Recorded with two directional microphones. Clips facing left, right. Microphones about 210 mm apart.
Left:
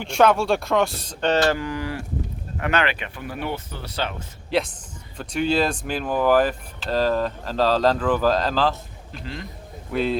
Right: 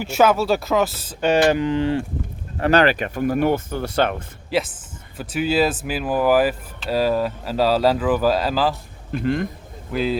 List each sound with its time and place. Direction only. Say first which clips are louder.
0.0 s speech: right 1 dB; 5° right (ahead or behind); by 2.0 s 25° right (ahead or behind)
2.6 s speech: right 7 dB; 35° right (ahead or behind); by 4.2 s 55° right (ahead or behind)
4.5 s speech: right 1 dB; 5° right (ahead or behind)
9.1 s a man's voice: right 13 dB; 55° right (ahead or behind)
9.9 s speech: right 1 dB; centre (ahead or behind)